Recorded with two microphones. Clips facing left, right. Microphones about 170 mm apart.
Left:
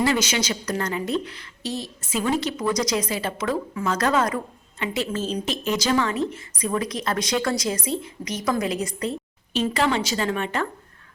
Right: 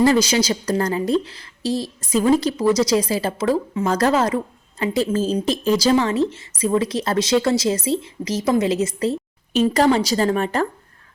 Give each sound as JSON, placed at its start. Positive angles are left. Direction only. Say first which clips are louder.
{"t": 0.0, "sound": "a woman's voice", "louder": "right 6 dB", "side_deg": -35}
{"t": 9.5, "sound": "a woman's voice", "louder": "right 6 dB", "side_deg": -45}